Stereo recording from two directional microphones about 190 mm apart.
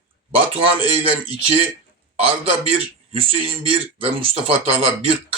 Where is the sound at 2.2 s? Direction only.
30° right (ahead or behind).